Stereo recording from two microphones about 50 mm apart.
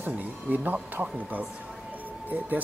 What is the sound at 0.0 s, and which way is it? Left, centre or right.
Speech, right.